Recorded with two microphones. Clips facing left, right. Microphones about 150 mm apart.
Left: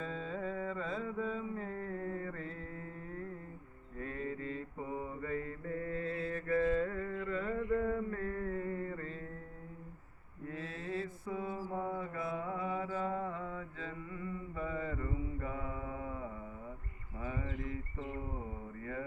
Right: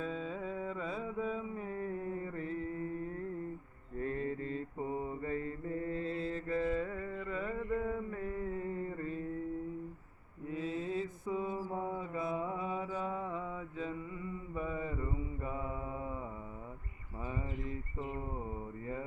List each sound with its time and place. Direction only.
0.0 s music: 5° right (ahead or behind)
4.0 s mantra: 35° right (ahead or behind); by 9.1 s 15° right (ahead or behind)
10.5 s mantra: 15° right (ahead or behind)